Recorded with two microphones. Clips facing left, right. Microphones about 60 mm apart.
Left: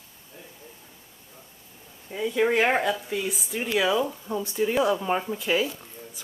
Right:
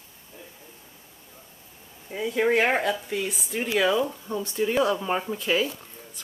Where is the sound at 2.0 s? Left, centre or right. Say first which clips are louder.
Even; centre.